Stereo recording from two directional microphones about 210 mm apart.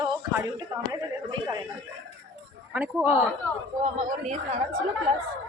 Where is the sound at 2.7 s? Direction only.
5° right (ahead or behind).